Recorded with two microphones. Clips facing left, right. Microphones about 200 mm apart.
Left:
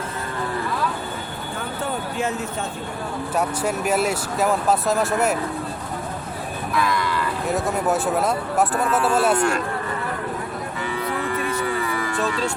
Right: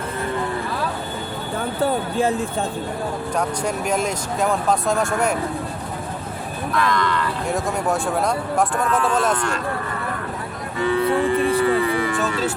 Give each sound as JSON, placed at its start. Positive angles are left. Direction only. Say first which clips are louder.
{"t": 2.1, "sound": "speech", "louder": "right 5 dB", "side_deg": -30}
{"t": 3.3, "sound": "speech", "louder": "left 2 dB", "side_deg": 5}
{"t": 6.7, "sound": "speech", "louder": "right 2 dB", "side_deg": 10}
{"t": 11.0, "sound": "speech", "louder": "right 6 dB", "side_deg": -30}